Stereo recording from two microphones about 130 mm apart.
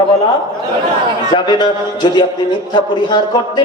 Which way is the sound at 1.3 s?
35° left (ahead or behind).